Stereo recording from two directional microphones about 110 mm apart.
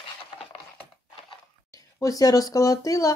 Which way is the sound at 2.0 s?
35° left (ahead or behind).